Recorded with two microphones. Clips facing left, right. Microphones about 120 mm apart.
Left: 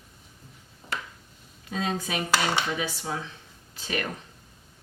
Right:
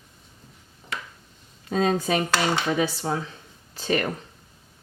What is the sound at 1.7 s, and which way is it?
Speech, 40° right (ahead or behind).